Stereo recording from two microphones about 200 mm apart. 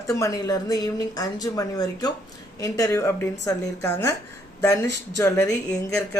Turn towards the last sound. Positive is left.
turn(degrees=5)  # may be behind; listen again after turning